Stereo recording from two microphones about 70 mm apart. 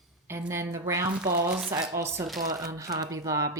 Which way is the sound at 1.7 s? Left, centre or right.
Right.